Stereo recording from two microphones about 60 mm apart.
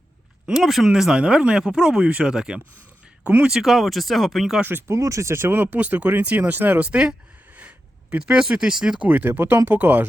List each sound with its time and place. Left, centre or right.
0.6 s speech: centre
4.9 s speech: right
8.1 s speech: centre
9.0 s speech: right